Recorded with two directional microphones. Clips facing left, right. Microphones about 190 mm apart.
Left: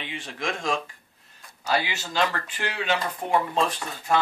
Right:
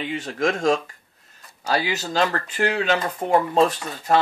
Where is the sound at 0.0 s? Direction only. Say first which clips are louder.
Right 9 dB; 45° right (ahead or behind).